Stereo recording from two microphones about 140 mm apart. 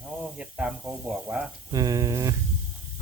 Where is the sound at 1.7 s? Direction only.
25° right (ahead or behind).